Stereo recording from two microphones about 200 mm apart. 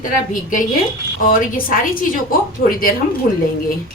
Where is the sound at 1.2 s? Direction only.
45° left (ahead or behind).